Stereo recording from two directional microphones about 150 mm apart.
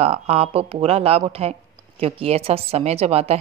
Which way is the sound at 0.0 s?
45° right (ahead or behind).